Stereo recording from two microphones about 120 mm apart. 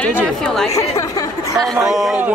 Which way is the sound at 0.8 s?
30° left (ahead or behind).